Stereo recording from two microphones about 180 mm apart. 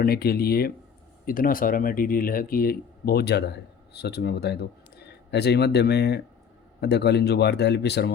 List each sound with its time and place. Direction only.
0.0 s speech: 60° left (ahead or behind)